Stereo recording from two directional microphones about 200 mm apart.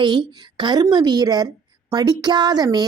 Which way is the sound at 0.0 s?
20° right (ahead or behind).